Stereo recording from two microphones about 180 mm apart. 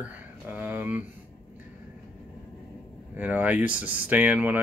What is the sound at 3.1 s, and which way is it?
Speech, 10° right (ahead or behind).